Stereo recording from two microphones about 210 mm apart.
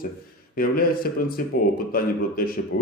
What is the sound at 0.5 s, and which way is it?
A man's voice, 45° left (ahead or behind).